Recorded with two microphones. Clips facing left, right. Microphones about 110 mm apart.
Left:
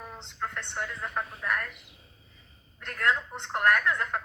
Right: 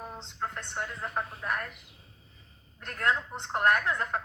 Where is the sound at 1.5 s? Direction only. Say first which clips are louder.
Left 4 dB; 25° right (ahead or behind).